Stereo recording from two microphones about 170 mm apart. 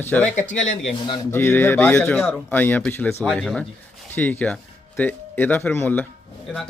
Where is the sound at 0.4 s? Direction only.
90° left.